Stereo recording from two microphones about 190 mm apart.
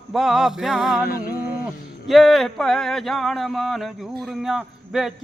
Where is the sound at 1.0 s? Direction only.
50° left (ahead or behind).